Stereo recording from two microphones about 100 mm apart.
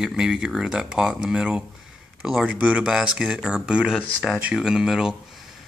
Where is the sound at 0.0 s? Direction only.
5° right (ahead or behind).